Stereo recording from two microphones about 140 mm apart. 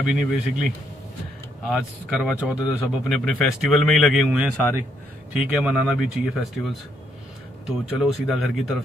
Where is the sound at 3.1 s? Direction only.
Centre (ahead or behind).